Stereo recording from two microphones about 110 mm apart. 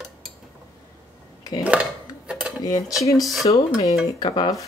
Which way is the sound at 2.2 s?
10° right (ahead or behind).